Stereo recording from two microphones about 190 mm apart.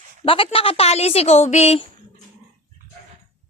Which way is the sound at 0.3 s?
30° left (ahead or behind).